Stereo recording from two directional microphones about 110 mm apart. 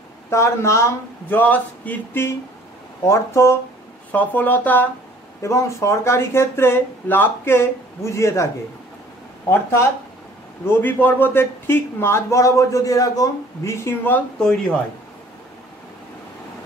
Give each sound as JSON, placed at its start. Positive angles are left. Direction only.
{"t": 0.3, "sound": "a man's voice", "side_deg": 25}
{"t": 1.4, "sound": "music", "side_deg": 15}
{"t": 3.1, "sound": "a man's voice", "side_deg": 25}
{"t": 4.1, "sound": "music", "side_deg": 15}
{"t": 5.4, "sound": "a man's voice", "side_deg": 25}
{"t": 9.5, "sound": "a man's voice", "side_deg": 20}
{"t": 14.4, "sound": "speech", "side_deg": 5}